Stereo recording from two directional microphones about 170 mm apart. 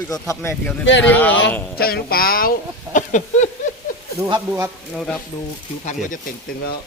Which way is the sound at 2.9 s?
45° left (ahead or behind).